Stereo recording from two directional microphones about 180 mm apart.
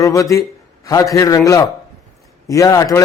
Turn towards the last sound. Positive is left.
turn(degrees=20)  # may be behind; listen again after turning